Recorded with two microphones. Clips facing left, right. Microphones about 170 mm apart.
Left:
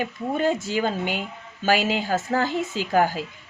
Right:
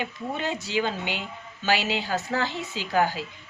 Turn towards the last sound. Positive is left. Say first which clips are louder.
# left 3 dB
turn(degrees=45)  # may be behind; listen again after turning